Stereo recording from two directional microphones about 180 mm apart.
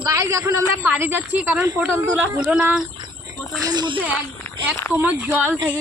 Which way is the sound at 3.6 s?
25° right (ahead or behind).